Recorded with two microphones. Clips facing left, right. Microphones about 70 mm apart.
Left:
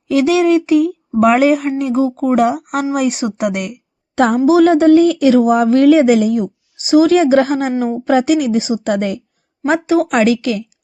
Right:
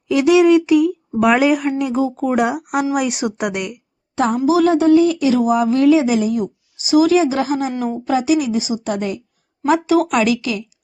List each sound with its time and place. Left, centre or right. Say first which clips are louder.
0.1 s a woman's voice: even; left
4.4 s speech: left 4 dB; left
9.6 s speech: left 1 dB; left